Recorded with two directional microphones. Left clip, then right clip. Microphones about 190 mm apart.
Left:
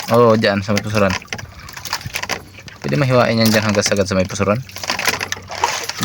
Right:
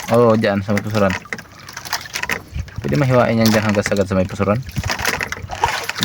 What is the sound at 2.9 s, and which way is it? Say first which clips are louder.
Speech: left 1 dB; centre (ahead or behind).